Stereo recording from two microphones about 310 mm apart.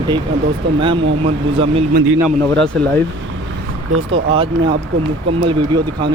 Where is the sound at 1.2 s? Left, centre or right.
Centre.